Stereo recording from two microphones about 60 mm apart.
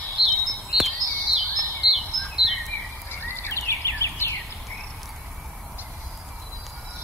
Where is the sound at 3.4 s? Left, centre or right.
Left.